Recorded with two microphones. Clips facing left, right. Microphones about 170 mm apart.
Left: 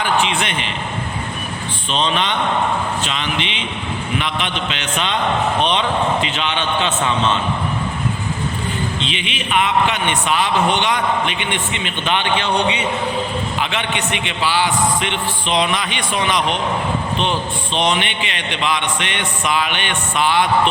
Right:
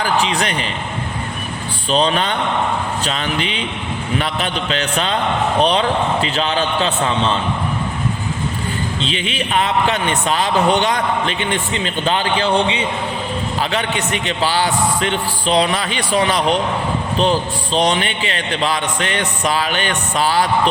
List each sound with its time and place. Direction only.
0.0 s a man's voice: 35° right (ahead or behind)
1.9 s a man's voice: 40° right (ahead or behind)
9.0 s a man's voice: 40° right (ahead or behind)